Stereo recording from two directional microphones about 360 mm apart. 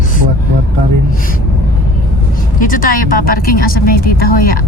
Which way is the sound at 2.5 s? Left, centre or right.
Left.